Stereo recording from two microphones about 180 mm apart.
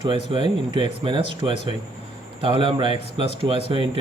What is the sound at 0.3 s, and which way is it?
Speech, 25° right (ahead or behind).